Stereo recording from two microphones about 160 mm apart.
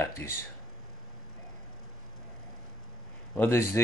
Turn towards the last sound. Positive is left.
turn(degrees=15)  # may be behind; listen again after turning